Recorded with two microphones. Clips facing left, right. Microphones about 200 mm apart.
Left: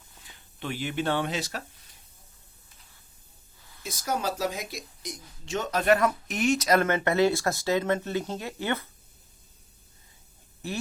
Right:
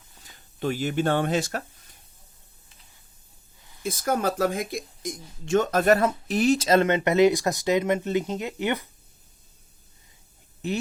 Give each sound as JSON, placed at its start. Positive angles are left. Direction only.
{"t": 0.3, "sound": "speech", "side_deg": -40}
{"t": 3.8, "sound": "speech", "side_deg": -55}
{"t": 6.0, "sound": "speech", "side_deg": -30}
{"t": 10.6, "sound": "speech", "side_deg": -20}